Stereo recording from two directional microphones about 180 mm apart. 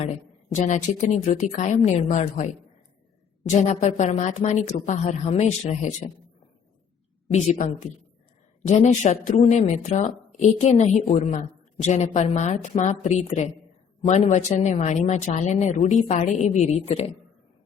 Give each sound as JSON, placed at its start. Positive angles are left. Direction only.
{"t": 0.5, "sound": "speech", "side_deg": 40}
{"t": 3.5, "sound": "speech", "side_deg": 40}
{"t": 7.3, "sound": "speech", "side_deg": 40}